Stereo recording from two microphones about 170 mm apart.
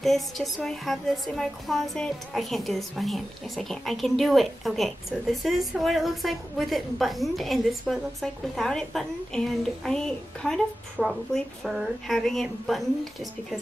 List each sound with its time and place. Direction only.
0.0 s speech: centre (ahead or behind)